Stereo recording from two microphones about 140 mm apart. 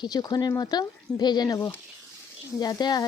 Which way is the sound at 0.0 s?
30° left (ahead or behind).